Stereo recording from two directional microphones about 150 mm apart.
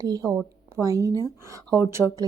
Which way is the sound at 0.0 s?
25° right (ahead or behind).